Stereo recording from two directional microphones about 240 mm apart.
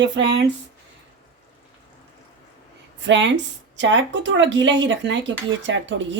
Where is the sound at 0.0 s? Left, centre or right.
Right.